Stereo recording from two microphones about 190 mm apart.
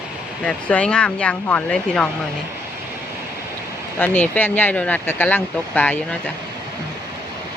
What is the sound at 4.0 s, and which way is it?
Speech, 10° left (ahead or behind).